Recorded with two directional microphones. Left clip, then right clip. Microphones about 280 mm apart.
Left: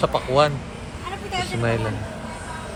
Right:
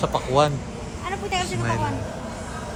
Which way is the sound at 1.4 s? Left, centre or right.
Centre.